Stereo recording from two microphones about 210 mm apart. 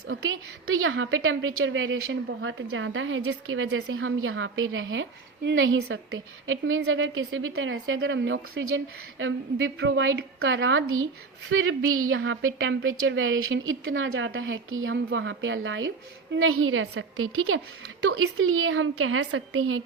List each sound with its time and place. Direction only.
0.1 s a woman's voice: 75° right (ahead or behind)
16.3 s a woman's voice: 75° right (ahead or behind)